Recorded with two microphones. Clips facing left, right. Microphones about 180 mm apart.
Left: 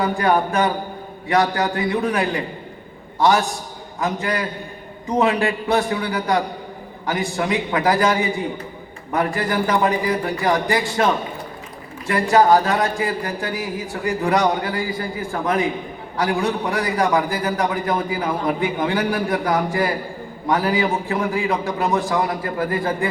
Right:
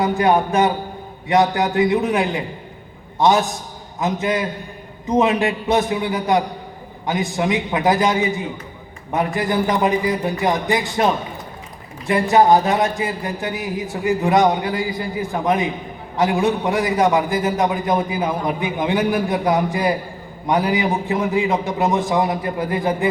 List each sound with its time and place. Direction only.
0.2 s a man's voice: 20° right (ahead or behind)
12.0 s a man's voice: 20° right (ahead or behind)